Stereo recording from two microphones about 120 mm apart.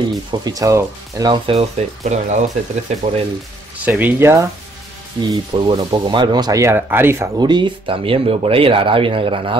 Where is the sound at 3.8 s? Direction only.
15° right (ahead or behind).